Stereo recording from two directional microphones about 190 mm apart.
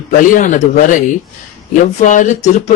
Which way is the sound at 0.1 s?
45° left (ahead or behind).